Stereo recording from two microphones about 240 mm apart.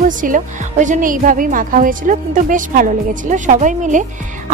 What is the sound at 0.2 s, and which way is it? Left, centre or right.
Speech, right.